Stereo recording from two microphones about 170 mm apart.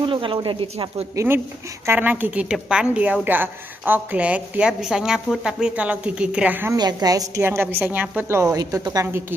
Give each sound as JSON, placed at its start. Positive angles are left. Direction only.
{"t": 0.0, "sound": "speech", "side_deg": -30}
{"t": 1.1, "sound": "a woman's voice", "side_deg": -15}
{"t": 6.8, "sound": "a woman's voice", "side_deg": -25}